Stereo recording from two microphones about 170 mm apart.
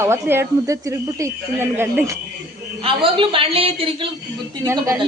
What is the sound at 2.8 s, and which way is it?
A man's voice, 30° right (ahead or behind).